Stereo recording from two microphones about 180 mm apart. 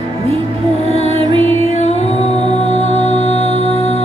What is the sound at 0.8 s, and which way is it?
Music, 35° left (ahead or behind).